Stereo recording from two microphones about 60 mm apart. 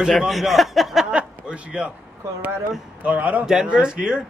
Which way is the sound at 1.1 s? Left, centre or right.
Centre.